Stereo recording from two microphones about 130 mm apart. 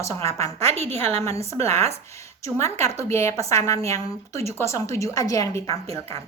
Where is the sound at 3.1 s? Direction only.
20° left (ahead or behind).